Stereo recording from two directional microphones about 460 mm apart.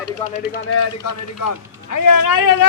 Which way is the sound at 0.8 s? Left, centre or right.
Left.